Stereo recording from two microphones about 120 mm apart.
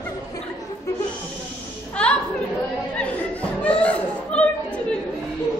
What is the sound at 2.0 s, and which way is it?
Chatter, 10° left (ahead or behind).